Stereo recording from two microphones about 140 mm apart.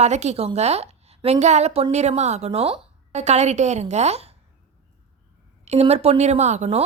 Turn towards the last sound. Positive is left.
turn(degrees=-55)  # may be behind; listen again after turning